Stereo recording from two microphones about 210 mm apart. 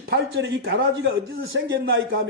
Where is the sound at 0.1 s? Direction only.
55° right (ahead or behind).